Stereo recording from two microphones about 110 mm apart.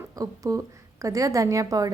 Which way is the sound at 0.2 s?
30° right (ahead or behind).